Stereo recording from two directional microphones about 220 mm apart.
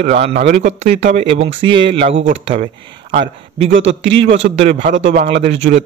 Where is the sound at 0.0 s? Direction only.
30° right (ahead or behind).